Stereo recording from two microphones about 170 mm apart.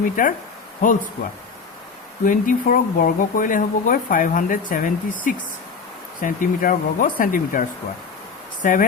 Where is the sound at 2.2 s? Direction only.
50° left (ahead or behind).